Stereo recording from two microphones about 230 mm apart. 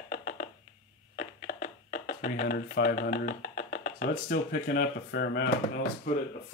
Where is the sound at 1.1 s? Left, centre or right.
Left.